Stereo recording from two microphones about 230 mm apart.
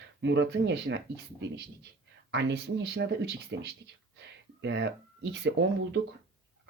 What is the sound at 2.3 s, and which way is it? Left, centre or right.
Speech, right.